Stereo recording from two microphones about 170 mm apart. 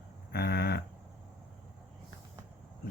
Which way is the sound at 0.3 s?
70° left (ahead or behind).